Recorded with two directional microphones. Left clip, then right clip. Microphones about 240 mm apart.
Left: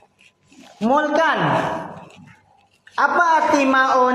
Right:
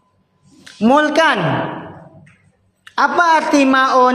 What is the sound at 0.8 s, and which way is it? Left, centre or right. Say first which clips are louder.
Speech: right 5 dB; right.